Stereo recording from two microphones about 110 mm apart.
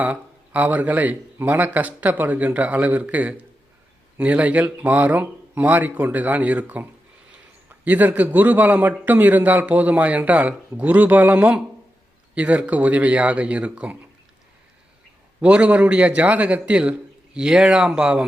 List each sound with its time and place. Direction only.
0.0 s a man's voice: 15° right (ahead or behind)
7.9 s a man's voice: 15° right (ahead or behind)
15.4 s a man's voice: 10° right (ahead or behind)